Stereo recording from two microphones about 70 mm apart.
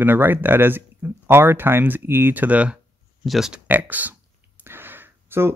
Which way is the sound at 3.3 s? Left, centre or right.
Centre.